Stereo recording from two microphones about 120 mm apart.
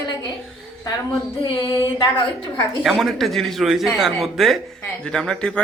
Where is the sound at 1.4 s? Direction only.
45° left (ahead or behind).